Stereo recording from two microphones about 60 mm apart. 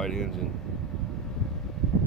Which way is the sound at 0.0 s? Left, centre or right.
Centre.